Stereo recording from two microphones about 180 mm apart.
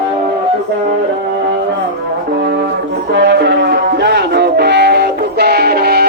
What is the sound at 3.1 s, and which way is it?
Music, 75° right (ahead or behind).